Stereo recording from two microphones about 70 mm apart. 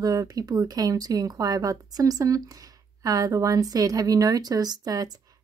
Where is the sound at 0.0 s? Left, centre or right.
Right.